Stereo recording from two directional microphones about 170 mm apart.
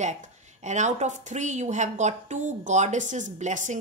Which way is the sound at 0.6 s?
45° right (ahead or behind).